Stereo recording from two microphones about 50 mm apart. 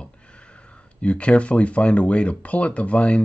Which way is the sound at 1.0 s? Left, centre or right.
Left.